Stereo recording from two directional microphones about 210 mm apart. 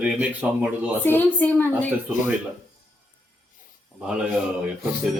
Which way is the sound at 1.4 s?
10° left (ahead or behind).